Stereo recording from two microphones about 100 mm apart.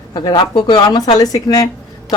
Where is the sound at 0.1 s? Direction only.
45° left (ahead or behind).